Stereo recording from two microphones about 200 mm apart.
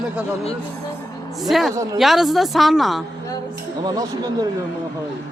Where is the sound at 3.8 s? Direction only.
20° right (ahead or behind).